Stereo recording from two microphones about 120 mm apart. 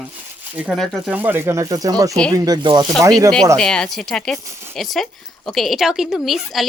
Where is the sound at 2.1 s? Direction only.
5° left (ahead or behind).